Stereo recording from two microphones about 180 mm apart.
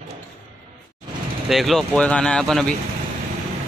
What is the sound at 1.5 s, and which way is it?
Speech, centre (ahead or behind).